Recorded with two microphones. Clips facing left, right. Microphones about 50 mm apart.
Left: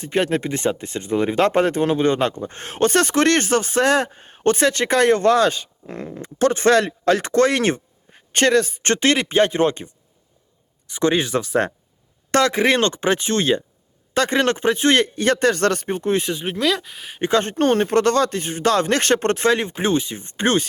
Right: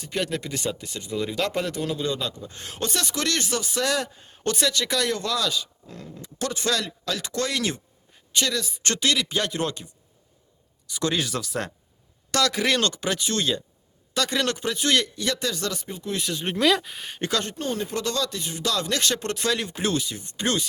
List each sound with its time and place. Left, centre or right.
0.0 s speech: left
16.5 s speech: centre
17.2 s speech: left
17.4 s speech: left